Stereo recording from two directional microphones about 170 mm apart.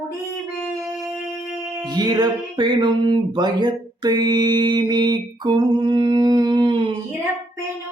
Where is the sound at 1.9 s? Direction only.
25° right (ahead or behind).